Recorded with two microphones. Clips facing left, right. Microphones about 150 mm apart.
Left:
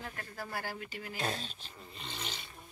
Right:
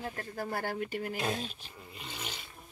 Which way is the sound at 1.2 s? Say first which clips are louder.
Right 1 dB; 10° right (ahead or behind).